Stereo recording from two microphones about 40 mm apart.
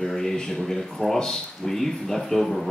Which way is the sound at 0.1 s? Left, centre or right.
Centre.